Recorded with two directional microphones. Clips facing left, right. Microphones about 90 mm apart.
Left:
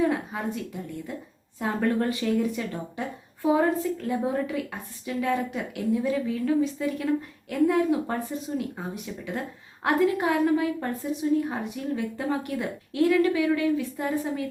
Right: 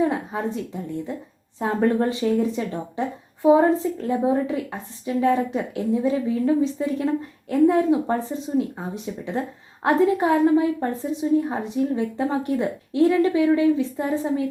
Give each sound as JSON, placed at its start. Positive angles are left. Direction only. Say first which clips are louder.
{"t": 0.0, "sound": "a sound", "louder": "right 3 dB", "side_deg": -25}
{"t": 1.5, "sound": "a woman's voice", "louder": "right 5 dB", "side_deg": -25}
{"t": 9.8, "sound": "a woman's voice", "louder": "right 4 dB", "side_deg": -30}